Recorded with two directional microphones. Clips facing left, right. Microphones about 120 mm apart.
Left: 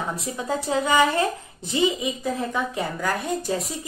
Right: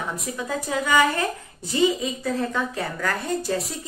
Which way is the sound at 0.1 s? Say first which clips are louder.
Left 1 dB; 30° left (ahead or behind).